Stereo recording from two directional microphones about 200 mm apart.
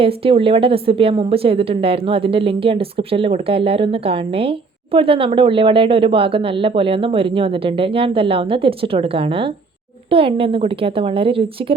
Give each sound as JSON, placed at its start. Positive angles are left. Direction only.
{"t": 0.0, "sound": "a woman's voice", "side_deg": -30}